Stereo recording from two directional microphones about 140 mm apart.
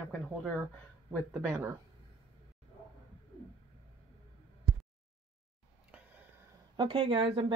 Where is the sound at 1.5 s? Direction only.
15° right (ahead or behind).